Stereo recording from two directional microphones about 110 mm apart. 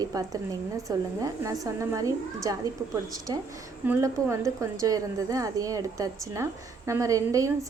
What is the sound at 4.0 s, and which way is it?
A woman's voice, 30° right (ahead or behind).